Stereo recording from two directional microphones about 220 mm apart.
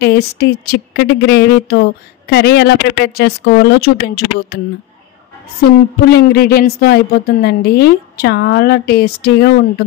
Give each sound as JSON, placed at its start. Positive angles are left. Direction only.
{"t": 0.0, "sound": "speech", "side_deg": 50}
{"t": 5.6, "sound": "speech", "side_deg": 45}